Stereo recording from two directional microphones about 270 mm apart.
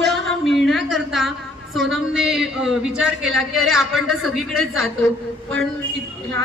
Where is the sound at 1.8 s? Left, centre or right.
Centre.